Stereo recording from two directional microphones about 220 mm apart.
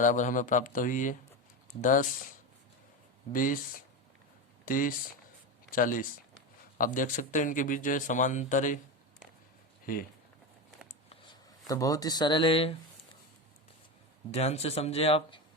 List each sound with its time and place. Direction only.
0.0 s speech: 35° left (ahead or behind)
3.3 s speech: 40° left (ahead or behind)
4.6 s speech: 40° left (ahead or behind)
9.8 s speech: 40° left (ahead or behind)
11.6 s speech: 15° left (ahead or behind)
14.3 s speech: 30° left (ahead or behind)